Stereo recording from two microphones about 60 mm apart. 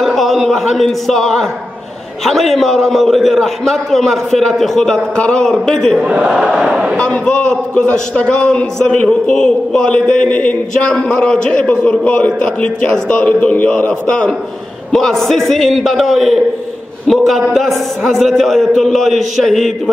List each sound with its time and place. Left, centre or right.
0.0 s a man's voice: centre
5.9 s speech: centre
7.0 s a man's voice: centre
14.9 s a man's voice: centre
18.1 s a man's voice: centre